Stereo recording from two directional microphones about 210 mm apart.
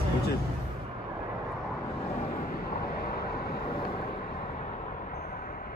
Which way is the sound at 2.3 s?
45° left (ahead or behind).